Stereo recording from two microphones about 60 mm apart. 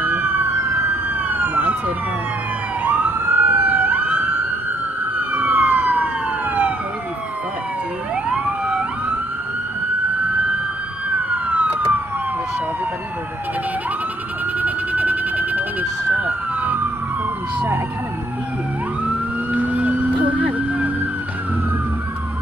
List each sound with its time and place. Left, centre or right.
0.0 s emergency vehicle: right
1.3 s emergency vehicle: right
2.8 s emergency vehicle: right
8.3 s emergency vehicle: centre
11.2 s police car: right
14.6 s emergency vehicle: right
19.5 s emergency vehicle: right